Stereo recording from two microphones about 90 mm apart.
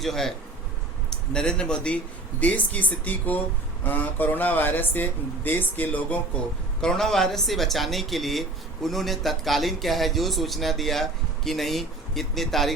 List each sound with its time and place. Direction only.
0.0 s speech: 5° left (ahead or behind)
6.8 s speech: 5° left (ahead or behind)